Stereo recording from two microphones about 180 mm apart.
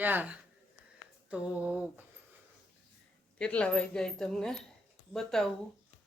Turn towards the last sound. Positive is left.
turn(degrees=5)  # may be behind; listen again after turning